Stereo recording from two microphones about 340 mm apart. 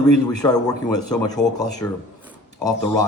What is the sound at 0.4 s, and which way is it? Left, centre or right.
A man's voice, centre.